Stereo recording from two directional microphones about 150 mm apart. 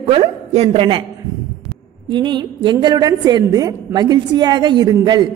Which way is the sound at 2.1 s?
30° right (ahead or behind).